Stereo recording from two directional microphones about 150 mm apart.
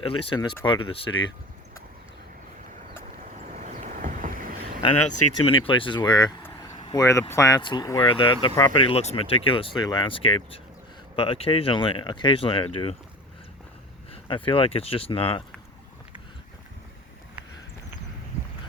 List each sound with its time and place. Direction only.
0.0 s speech: 35° left (ahead or behind)
3.5 s boat: 60° right (ahead or behind)
4.8 s speech: 35° left (ahead or behind)
14.1 s speech: 35° left (ahead or behind)